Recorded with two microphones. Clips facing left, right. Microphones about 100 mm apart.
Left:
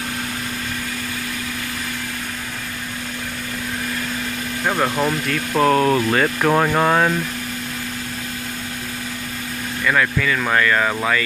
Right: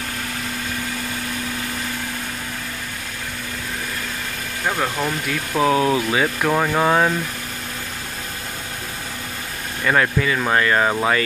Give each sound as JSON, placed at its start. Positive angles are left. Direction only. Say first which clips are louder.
{"t": 4.6, "sound": "speech", "louder": "left 3 dB", "side_deg": 10}
{"t": 5.2, "sound": "speech", "louder": "right 1 dB", "side_deg": -5}
{"t": 9.8, "sound": "speech", "louder": "right 1 dB", "side_deg": -30}